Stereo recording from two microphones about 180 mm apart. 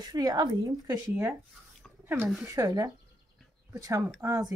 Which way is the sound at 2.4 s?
20° right (ahead or behind).